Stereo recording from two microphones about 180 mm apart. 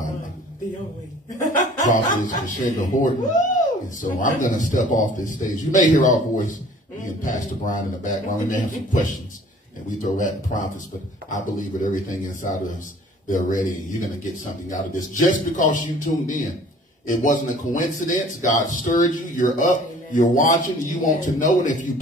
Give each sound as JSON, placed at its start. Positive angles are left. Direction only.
{"t": 1.4, "sound": "speech", "side_deg": 45}
{"t": 10.0, "sound": "speech", "side_deg": 45}
{"t": 14.7, "sound": "speech", "side_deg": 45}